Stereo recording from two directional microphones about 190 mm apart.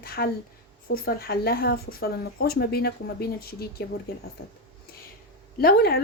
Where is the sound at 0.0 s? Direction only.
55° left (ahead or behind).